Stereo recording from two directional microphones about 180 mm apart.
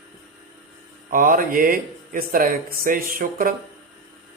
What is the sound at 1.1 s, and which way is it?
Speech, 50° right (ahead or behind).